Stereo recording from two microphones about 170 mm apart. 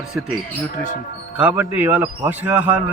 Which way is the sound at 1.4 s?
10° right (ahead or behind).